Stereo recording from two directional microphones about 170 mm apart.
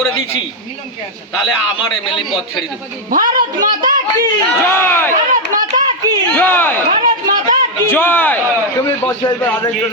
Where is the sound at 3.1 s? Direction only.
55° right (ahead or behind).